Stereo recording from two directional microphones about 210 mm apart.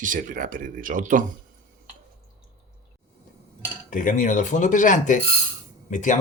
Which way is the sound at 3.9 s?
40° left (ahead or behind).